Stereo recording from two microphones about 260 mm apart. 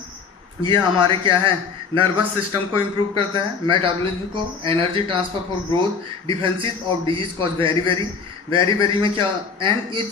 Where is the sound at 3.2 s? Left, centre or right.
Centre.